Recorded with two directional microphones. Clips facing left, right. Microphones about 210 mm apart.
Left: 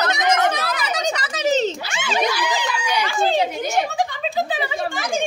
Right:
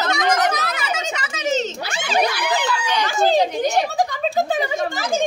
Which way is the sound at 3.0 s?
40° right (ahead or behind).